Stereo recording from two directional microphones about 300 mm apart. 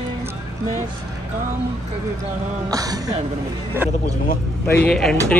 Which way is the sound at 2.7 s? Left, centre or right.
Centre.